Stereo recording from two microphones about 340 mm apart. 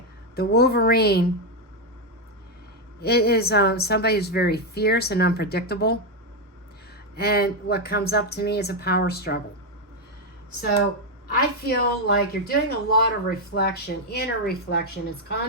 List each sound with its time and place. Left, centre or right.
0.3 s speech: left
3.0 s speech: left
7.2 s speech: left
11.6 s speech: left